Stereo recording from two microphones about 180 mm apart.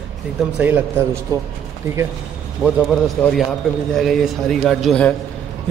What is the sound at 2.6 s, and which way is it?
A man's voice, centre (ahead or behind).